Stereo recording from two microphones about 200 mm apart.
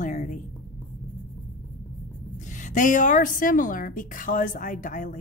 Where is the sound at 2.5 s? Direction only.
40° left (ahead or behind).